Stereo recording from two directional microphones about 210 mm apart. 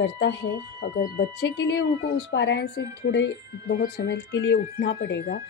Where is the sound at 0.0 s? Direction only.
55° left (ahead or behind).